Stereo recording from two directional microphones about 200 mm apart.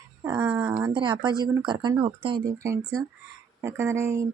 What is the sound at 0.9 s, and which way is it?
Speech, 25° right (ahead or behind).